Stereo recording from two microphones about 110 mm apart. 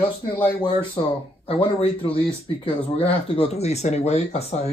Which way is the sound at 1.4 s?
60° left (ahead or behind).